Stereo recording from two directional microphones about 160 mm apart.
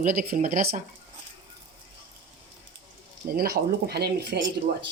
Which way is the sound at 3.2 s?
70° right (ahead or behind).